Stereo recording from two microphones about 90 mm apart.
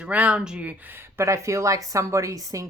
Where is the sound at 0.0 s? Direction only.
15° right (ahead or behind).